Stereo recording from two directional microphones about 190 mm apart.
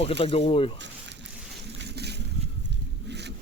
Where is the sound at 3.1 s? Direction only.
65° right (ahead or behind).